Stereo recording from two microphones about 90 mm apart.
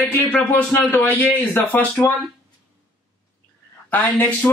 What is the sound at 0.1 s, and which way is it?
A man's voice, 20° left (ahead or behind).